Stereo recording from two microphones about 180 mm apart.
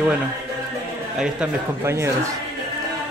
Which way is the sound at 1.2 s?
10° right (ahead or behind).